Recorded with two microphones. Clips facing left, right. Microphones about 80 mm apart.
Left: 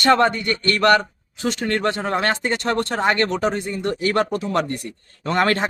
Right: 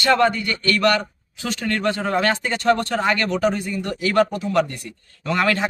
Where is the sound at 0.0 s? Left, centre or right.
Left.